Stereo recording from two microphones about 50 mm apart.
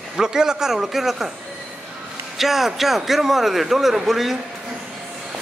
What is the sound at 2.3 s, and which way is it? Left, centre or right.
A man's voice, centre.